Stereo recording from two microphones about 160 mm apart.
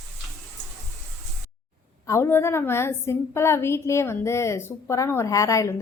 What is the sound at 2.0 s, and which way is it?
A woman's voice, 15° left (ahead or behind).